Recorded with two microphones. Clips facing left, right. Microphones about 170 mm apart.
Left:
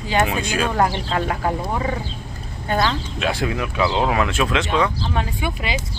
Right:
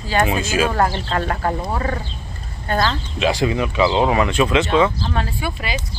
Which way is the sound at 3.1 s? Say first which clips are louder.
Right 7 dB; centre (ahead or behind).